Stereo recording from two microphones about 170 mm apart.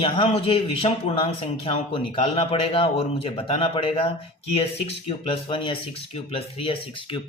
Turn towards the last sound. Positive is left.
turn(degrees=35)  # may be behind; listen again after turning